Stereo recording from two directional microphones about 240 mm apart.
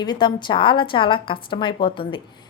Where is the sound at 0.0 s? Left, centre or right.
Centre.